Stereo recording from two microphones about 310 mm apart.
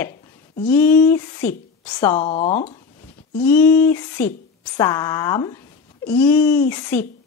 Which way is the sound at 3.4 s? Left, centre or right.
Centre.